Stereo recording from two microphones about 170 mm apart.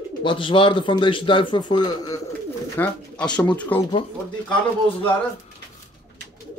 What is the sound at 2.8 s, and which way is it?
Speech, 5° left (ahead or behind).